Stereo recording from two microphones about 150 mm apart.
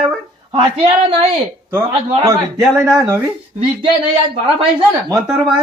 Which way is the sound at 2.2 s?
20° right (ahead or behind).